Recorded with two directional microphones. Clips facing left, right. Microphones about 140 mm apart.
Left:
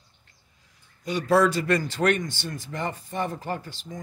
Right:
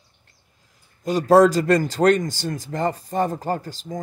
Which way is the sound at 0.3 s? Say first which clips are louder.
Right 2 dB; 40° right (ahead or behind).